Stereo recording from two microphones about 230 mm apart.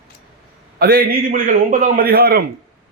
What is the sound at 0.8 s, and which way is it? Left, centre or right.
A man's voice, right.